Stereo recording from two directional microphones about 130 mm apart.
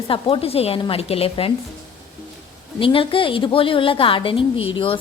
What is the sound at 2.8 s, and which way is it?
A woman's voice, 45° left (ahead or behind).